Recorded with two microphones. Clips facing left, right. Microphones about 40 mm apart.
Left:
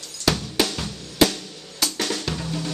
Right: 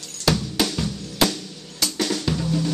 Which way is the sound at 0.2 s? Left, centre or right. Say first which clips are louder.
Right 1 dB; centre.